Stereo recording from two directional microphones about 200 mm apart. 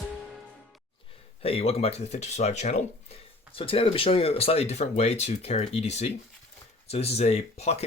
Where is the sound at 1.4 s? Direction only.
30° left (ahead or behind).